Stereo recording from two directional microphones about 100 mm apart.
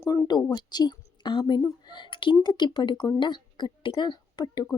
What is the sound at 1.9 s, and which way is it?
A woman's voice, 55° left (ahead or behind).